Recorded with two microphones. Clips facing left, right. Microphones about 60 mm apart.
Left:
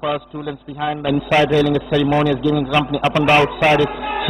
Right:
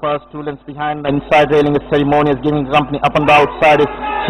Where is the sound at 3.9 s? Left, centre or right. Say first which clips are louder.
Right 4 dB; centre.